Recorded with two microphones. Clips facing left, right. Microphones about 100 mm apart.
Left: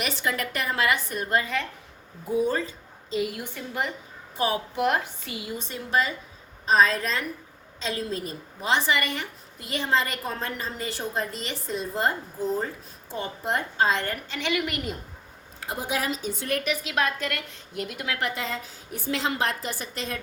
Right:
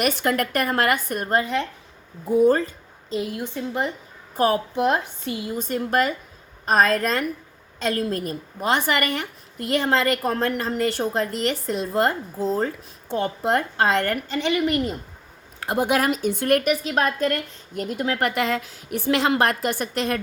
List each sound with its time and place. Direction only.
0.0 s a woman's voice: 55° right (ahead or behind)
1.4 s a woman's voice: 30° right (ahead or behind)
2.4 s a sound: 50° right (ahead or behind)
3.2 s a woman's voice: 25° right (ahead or behind)
4.4 s a woman's voice: 45° right (ahead or behind)
4.7 s a woman's voice: 25° right (ahead or behind)
5.5 s a woman's voice: 50° right (ahead or behind)
14.3 s a woman's voice: 35° right (ahead or behind)
15.6 s a woman's voice: 65° right (ahead or behind)
16.8 s a woman's voice: 40° right (ahead or behind)
18.2 s a woman's voice: 65° right (ahead or behind)